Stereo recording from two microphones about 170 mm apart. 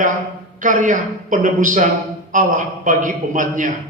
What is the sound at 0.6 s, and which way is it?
A man's voice, 50° right (ahead or behind).